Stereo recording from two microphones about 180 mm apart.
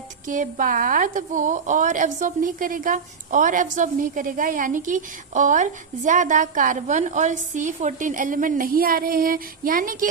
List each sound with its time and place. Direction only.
0.3 s a woman's voice: 45° right (ahead or behind)